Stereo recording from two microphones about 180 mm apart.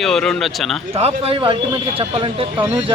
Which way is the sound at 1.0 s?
30° right (ahead or behind).